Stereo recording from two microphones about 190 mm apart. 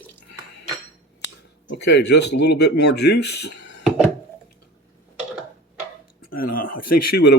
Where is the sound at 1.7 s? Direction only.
65° left (ahead or behind).